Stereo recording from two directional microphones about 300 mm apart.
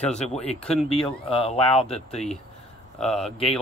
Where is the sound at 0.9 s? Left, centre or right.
Centre.